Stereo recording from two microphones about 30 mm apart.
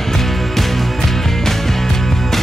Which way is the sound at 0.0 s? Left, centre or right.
Centre.